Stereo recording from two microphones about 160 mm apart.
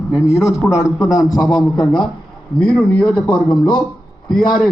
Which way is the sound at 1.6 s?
30° left (ahead or behind).